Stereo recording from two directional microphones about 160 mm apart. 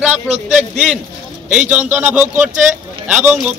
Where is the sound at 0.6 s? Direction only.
5° right (ahead or behind).